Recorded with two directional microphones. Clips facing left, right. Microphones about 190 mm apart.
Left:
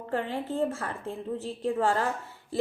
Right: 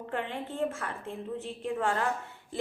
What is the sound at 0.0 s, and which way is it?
A woman's voice, 35° left (ahead or behind).